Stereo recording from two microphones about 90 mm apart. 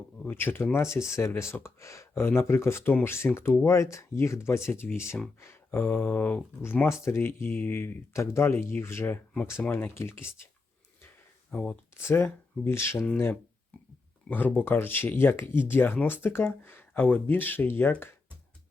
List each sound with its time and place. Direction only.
0.3 s speech: 25° left (ahead or behind)
11.5 s speech: 10° left (ahead or behind)
12.0 s speech: 25° left (ahead or behind)
14.3 s speech: 20° left (ahead or behind)